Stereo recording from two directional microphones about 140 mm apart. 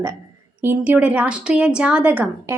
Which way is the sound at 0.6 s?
10° right (ahead or behind).